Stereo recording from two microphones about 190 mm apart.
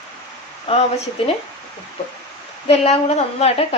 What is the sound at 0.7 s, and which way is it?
Speech, 30° left (ahead or behind).